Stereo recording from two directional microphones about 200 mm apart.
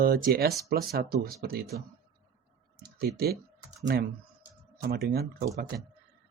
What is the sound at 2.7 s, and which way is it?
Clicking, 50° right (ahead or behind).